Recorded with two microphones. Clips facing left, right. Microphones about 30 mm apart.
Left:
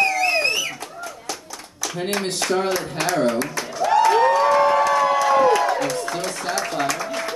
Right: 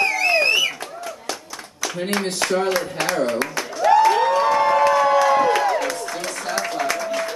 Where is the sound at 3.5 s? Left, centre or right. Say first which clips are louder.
Right 6 dB; centre.